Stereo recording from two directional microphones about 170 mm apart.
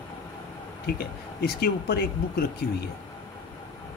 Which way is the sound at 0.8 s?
70° left (ahead or behind).